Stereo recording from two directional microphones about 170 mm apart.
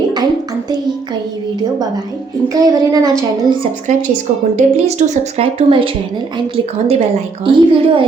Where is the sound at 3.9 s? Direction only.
50° right (ahead or behind); by 5.9 s 35° right (ahead or behind).